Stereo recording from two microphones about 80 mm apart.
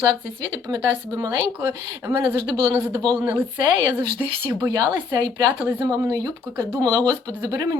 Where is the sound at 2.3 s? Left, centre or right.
Right.